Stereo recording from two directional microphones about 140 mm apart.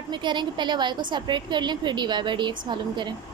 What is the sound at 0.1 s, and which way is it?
A woman's voice, 35° right (ahead or behind).